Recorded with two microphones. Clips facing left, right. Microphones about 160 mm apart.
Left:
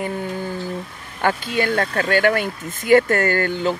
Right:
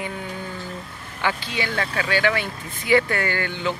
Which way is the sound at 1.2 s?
50° left (ahead or behind).